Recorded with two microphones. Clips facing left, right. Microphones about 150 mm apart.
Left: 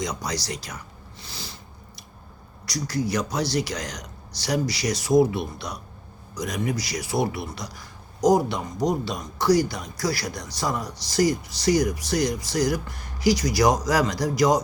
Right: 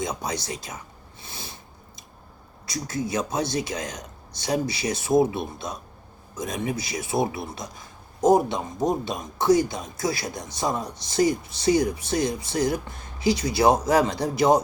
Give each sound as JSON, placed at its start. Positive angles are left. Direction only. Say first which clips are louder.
{"t": 0.0, "sound": "a man's voice", "louder": "right 1 dB", "side_deg": -25}
{"t": 0.3, "sound": "speech", "louder": "left 1 dB", "side_deg": 75}
{"t": 1.3, "sound": "snort", "louder": "even", "side_deg": -25}
{"t": 2.6, "sound": "speech", "louder": "left 2 dB", "side_deg": 75}
{"t": 3.2, "sound": "a man's voice", "louder": "even", "side_deg": -25}
{"t": 3.4, "sound": "speech", "louder": "left 1 dB", "side_deg": 75}
{"t": 3.8, "sound": "a man's voice", "louder": "right 1 dB", "side_deg": -25}
{"t": 4.7, "sound": "speech", "louder": "left 1 dB", "side_deg": 80}
{"t": 5.0, "sound": "a man's voice", "louder": "left 1 dB", "side_deg": -25}